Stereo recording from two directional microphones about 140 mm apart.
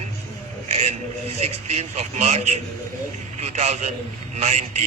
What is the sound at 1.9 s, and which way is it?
A man's voice, 50° right (ahead or behind).